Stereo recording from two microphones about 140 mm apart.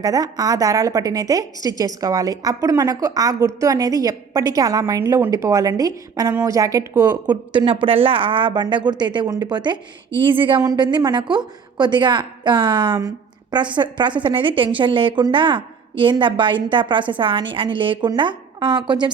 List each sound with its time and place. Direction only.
0.0 s a woman's voice: 25° right (ahead or behind)